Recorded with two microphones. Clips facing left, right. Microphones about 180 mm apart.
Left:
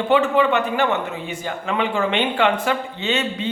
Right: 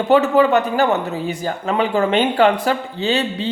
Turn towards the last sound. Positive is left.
turn(degrees=-35)  # may be behind; listen again after turning